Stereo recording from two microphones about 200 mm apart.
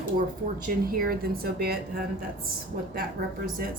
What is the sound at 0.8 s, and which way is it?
Speech, 45° right (ahead or behind).